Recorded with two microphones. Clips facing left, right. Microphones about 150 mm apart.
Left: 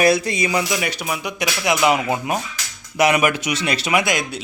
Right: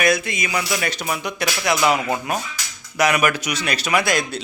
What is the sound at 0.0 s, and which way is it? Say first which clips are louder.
Speech: left 3 dB; 30° left (ahead or behind).